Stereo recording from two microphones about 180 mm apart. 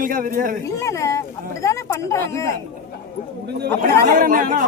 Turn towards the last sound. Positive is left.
turn(degrees=-50)  # may be behind; listen again after turning